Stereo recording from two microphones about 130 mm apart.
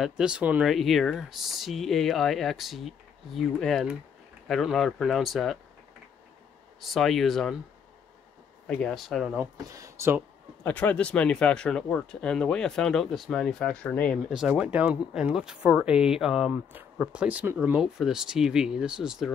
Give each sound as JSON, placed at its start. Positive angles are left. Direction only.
{"t": 0.0, "sound": "speech", "side_deg": -5}
{"t": 6.8, "sound": "speech", "side_deg": 0}
{"t": 8.6, "sound": "speech", "side_deg": 5}
{"t": 9.7, "sound": "speech", "side_deg": -25}
{"t": 10.6, "sound": "speech", "side_deg": 15}
{"t": 14.3, "sound": "speech", "side_deg": -5}